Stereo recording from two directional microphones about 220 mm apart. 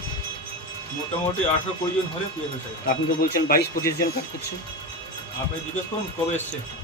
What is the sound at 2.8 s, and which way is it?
Speech, 40° left (ahead or behind).